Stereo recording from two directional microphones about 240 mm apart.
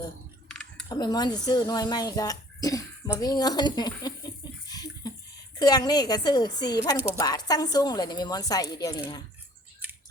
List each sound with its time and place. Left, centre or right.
0.4 s chewing: centre
0.9 s speech: centre
4.7 s bathtub: centre
5.5 s speech: centre